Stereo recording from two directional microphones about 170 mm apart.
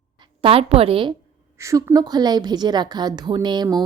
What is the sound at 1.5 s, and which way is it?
A woman's voice, 15° right (ahead or behind).